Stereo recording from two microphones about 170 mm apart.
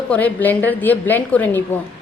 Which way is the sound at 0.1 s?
10° left (ahead or behind).